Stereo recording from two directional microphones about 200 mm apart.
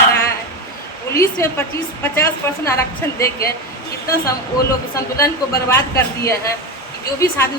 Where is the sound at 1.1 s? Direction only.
10° left (ahead or behind).